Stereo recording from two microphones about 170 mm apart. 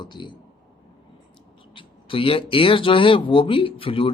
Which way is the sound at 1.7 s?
30° left (ahead or behind).